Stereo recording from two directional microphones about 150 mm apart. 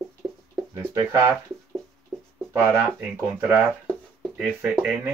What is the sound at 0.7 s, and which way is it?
Speech, 15° right (ahead or behind).